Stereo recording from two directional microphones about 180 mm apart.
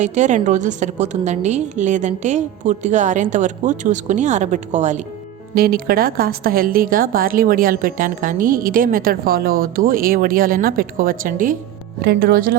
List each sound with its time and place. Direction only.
0.0 s a woman's voice: 40° right (ahead or behind)
5.5 s a woman's voice: 55° right (ahead or behind)